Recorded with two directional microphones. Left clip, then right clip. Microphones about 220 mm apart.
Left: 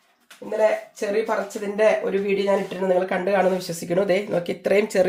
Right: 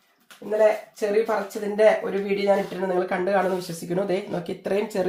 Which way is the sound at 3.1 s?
30° left (ahead or behind).